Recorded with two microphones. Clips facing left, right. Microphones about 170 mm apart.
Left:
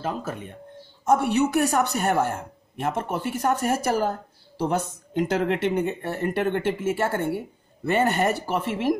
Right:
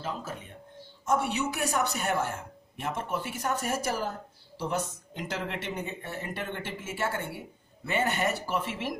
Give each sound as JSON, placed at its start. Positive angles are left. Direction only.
{"t": 0.0, "sound": "speech", "side_deg": 60}